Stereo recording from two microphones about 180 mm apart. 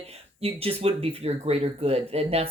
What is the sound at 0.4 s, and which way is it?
Speech, 35° right (ahead or behind).